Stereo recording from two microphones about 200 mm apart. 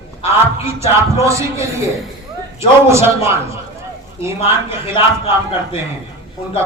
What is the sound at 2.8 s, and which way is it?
Speech, 15° right (ahead or behind).